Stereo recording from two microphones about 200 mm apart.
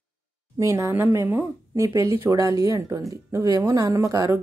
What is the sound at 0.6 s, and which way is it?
Speech, 15° right (ahead or behind).